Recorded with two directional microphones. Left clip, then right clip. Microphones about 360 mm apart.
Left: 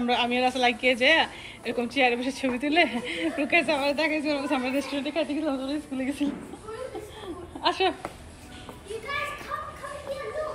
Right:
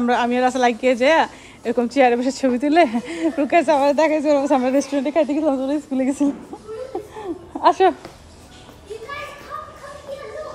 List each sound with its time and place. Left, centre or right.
0.0 s speech: right
1.9 s speech: centre
2.4 s speech: right
3.6 s speech: centre
4.9 s speech: right
5.4 s a woman's voice: centre
7.6 s speech: right